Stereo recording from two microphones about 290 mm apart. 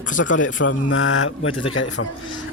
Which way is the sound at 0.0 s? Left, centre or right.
Left.